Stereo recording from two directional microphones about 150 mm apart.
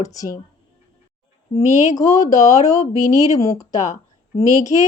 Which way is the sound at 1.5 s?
50° left (ahead or behind).